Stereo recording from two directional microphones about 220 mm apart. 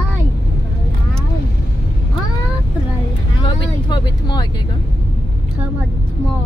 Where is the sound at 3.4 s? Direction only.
20° left (ahead or behind).